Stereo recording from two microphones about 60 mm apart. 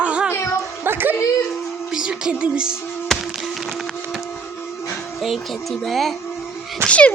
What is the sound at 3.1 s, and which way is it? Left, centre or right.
Music, centre.